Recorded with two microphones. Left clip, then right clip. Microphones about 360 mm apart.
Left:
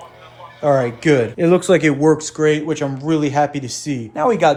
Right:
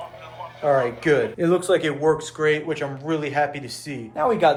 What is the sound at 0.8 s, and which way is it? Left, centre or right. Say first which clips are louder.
Speech: left 4 dB; centre.